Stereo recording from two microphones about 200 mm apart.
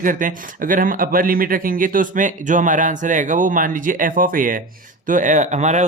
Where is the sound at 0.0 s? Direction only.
40° right (ahead or behind).